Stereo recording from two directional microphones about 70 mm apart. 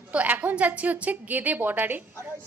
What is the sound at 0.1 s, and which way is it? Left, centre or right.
A woman's voice, right.